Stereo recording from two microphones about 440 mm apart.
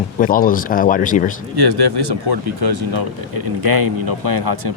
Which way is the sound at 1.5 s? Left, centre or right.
Right.